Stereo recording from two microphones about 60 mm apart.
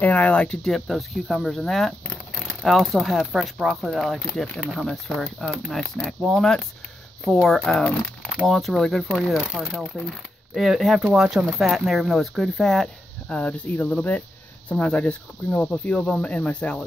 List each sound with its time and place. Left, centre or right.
0.0 s speech: left
0.7 s speech: centre
4.4 s speech: centre
13.3 s speech: centre